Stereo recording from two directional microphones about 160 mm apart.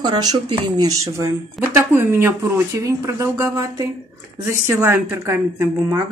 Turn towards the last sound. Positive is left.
turn(degrees=-15)  # may be behind; listen again after turning